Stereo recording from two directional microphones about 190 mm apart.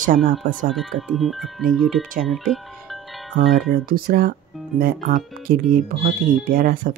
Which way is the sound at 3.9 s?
50° right (ahead or behind).